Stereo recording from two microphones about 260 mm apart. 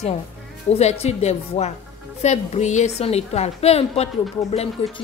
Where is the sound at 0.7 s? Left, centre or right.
Left.